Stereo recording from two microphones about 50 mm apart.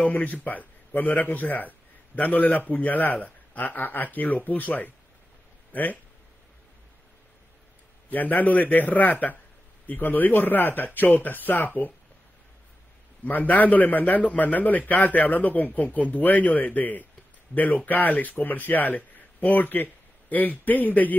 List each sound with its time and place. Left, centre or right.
0.0 s a man's voice: left
8.1 s a man's voice: left
13.2 s a man's voice: left